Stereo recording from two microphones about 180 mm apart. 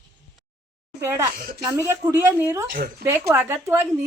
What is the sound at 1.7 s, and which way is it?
Speech, 15° right (ahead or behind).